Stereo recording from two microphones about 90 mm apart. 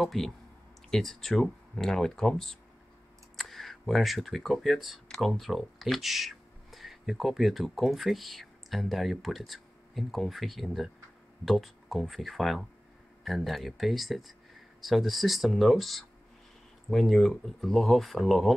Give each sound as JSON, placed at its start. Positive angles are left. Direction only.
{"t": 0.0, "sound": "speech", "side_deg": 0}
{"t": 5.0, "sound": "a sound", "side_deg": 5}
{"t": 5.3, "sound": "speech", "side_deg": 0}